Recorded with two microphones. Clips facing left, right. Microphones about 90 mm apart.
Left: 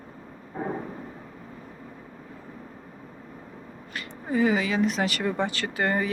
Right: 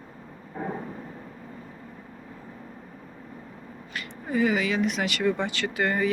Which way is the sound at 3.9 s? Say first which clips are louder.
Left 1 dB; 30° left (ahead or behind).